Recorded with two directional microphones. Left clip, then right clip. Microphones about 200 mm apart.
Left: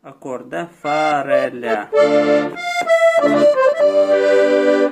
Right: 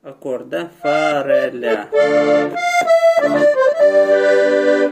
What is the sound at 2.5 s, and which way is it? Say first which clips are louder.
Accordion: right 2 dB; 5° right (ahead or behind).